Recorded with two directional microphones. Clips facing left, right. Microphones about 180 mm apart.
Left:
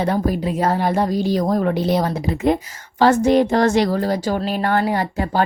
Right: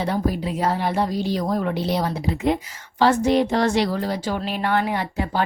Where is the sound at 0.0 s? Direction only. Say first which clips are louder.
Left 3 dB; 50° left (ahead or behind).